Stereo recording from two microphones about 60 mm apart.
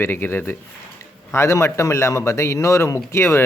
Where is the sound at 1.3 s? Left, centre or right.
Left.